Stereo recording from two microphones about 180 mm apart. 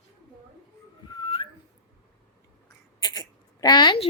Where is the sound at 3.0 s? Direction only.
20° left (ahead or behind).